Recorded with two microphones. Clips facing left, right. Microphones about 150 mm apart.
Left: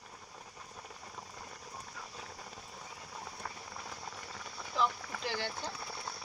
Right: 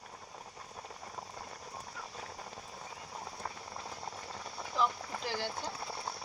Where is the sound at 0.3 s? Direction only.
20° right (ahead or behind).